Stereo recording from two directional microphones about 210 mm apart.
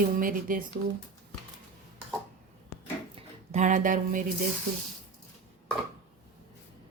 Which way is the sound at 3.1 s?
35° right (ahead or behind).